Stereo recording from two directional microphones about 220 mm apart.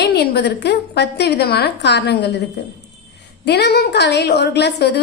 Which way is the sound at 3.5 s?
50° left (ahead or behind).